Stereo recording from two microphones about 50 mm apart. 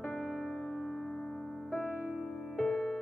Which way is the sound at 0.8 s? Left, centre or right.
Centre.